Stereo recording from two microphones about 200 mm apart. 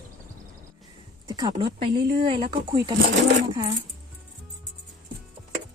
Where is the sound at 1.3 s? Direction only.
20° right (ahead or behind).